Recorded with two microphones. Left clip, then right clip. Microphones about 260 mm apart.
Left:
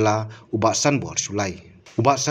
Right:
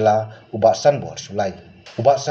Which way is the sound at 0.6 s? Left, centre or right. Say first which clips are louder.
Right 5 dB; left.